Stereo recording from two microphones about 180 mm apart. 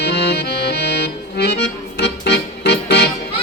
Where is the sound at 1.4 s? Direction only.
70° left (ahead or behind).